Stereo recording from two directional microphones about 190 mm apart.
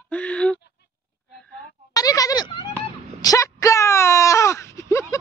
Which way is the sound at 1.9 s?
20° left (ahead or behind).